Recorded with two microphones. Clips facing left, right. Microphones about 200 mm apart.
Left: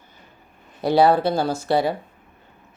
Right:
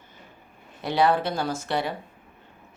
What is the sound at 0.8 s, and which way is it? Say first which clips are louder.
Mantra: left 6 dB; 35° left (ahead or behind).